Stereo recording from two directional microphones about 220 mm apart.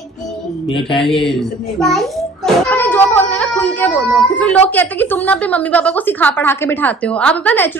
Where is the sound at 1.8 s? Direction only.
Centre (ahead or behind).